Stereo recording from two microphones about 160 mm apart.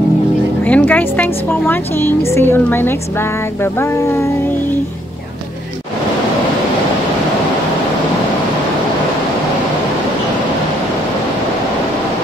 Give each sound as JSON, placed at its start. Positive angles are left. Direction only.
{"t": 0.7, "sound": "a woman's voice", "side_deg": 10}
{"t": 4.0, "sound": "a woman's voice", "side_deg": 15}